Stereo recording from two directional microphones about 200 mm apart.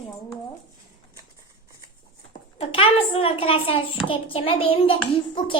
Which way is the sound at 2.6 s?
30° left (ahead or behind).